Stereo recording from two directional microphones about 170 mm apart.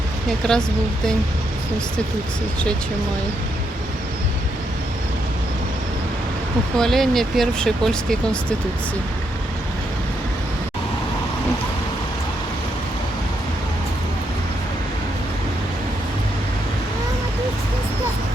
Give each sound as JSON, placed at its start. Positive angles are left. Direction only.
{"t": 0.4, "sound": "speech", "side_deg": 5}
{"t": 6.7, "sound": "speech", "side_deg": 0}